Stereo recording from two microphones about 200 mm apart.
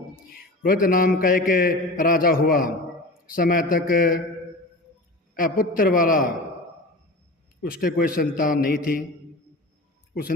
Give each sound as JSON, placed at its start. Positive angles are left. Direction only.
{"t": 0.3, "sound": "a man's voice", "side_deg": 45}
{"t": 5.4, "sound": "a man's voice", "side_deg": 45}
{"t": 7.6, "sound": "a man's voice", "side_deg": 50}